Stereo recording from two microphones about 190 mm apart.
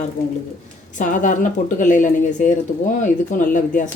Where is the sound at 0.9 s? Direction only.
45° left (ahead or behind).